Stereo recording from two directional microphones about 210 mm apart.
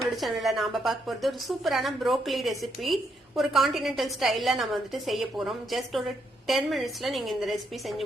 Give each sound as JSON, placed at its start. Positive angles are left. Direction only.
{"t": 0.2, "sound": "a woman's voice", "side_deg": 0}